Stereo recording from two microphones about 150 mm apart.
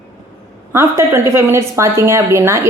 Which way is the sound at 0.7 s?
15° right (ahead or behind).